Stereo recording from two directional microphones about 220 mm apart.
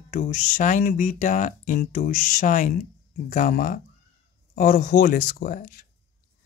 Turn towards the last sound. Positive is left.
turn(degrees=40)  # may be behind; listen again after turning